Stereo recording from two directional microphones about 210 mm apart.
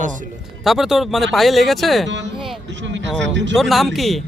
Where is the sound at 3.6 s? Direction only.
Centre (ahead or behind).